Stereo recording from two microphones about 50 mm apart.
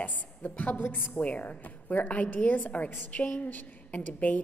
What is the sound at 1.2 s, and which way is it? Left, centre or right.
A woman's voice, left.